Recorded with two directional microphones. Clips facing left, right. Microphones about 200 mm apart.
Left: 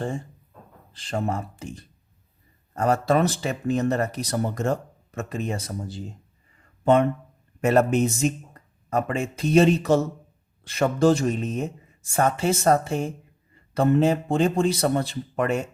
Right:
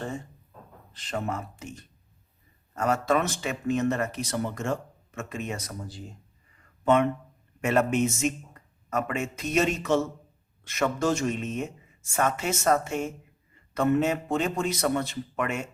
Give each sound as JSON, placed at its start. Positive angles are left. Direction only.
{"t": 0.9, "sound": "speech", "side_deg": 30}